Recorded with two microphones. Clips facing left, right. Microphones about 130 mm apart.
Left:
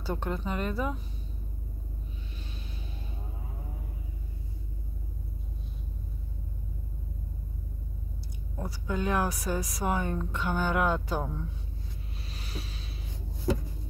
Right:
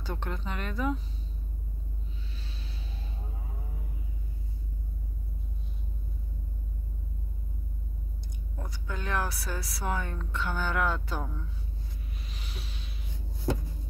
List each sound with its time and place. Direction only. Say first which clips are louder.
0.0 s speech: left 4 dB; 5° left (ahead or behind)
8.5 s a woman's voice: left 7 dB; 10° left (ahead or behind)
12.3 s a sound: left 6 dB; 40° left (ahead or behind)